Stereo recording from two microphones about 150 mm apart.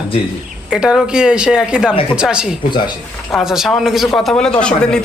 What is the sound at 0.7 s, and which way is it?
Speech, 5° right (ahead or behind).